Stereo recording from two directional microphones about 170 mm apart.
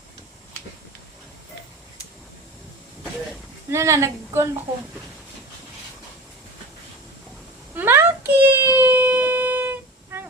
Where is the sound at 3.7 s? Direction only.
15° right (ahead or behind).